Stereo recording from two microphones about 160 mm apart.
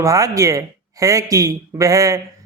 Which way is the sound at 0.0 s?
20° right (ahead or behind).